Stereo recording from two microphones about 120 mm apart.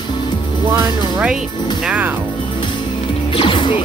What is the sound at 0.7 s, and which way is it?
Speech, 20° right (ahead or behind).